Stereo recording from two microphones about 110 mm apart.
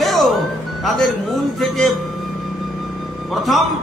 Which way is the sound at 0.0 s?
Centre (ahead or behind).